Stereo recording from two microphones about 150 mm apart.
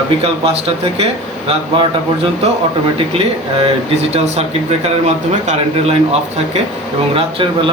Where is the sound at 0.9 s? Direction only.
40° right (ahead or behind).